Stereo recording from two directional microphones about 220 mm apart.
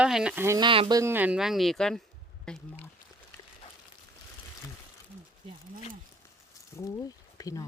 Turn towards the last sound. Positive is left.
turn(degrees=15)  # may be behind; listen again after turning